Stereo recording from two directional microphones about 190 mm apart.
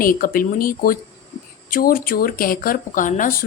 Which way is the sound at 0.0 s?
50° left (ahead or behind).